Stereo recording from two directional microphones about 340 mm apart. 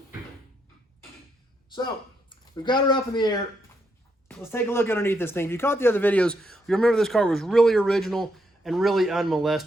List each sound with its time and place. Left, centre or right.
2.4 s speech: centre